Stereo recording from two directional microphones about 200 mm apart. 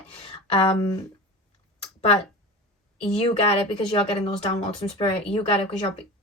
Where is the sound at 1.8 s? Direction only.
30° left (ahead or behind).